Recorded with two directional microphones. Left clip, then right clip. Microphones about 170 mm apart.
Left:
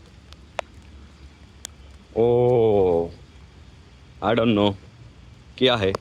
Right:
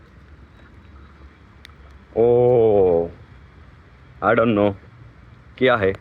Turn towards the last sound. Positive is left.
turn(degrees=15)  # may be behind; listen again after turning